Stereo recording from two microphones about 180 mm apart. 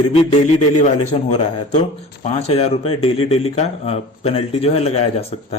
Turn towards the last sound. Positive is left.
turn(degrees=35)  # may be behind; listen again after turning